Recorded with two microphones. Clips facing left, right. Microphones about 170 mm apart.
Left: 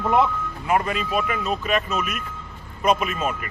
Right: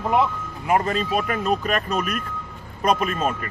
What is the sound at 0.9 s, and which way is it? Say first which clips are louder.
Speech: right 1 dB; 40° right (ahead or behind).